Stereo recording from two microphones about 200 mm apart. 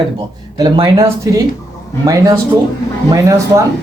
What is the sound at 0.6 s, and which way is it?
Speech, 20° right (ahead or behind).